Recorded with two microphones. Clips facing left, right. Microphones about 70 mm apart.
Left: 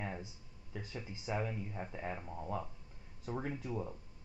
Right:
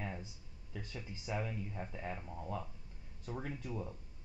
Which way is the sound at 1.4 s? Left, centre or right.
Centre.